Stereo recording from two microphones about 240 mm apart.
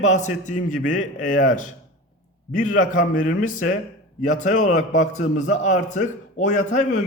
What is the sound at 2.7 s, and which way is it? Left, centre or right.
A man's voice, left.